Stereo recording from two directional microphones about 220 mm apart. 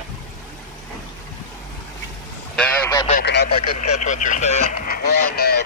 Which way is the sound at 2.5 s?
5° left (ahead or behind).